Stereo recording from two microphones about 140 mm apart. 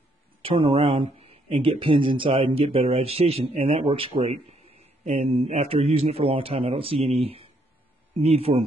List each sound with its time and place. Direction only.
0.4 s speech: 40° right (ahead or behind)